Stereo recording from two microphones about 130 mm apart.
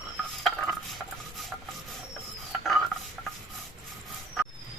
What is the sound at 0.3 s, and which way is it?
Cutlery, centre (ahead or behind).